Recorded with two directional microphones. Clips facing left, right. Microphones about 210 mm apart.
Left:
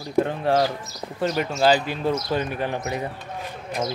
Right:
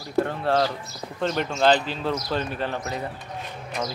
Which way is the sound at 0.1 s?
15° left (ahead or behind).